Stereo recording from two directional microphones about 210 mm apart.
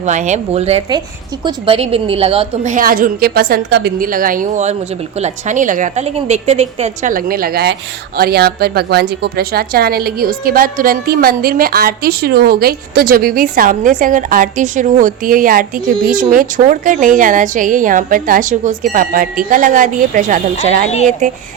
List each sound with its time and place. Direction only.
0.0 s a woman's voice: 35° right (ahead or behind)